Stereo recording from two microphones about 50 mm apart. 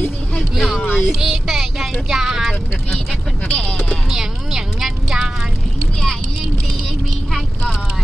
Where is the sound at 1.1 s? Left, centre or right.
Centre.